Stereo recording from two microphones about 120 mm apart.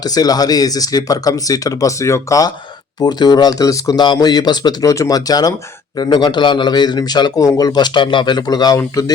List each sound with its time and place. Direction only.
0.0 s a man's voice: 35° left (ahead or behind)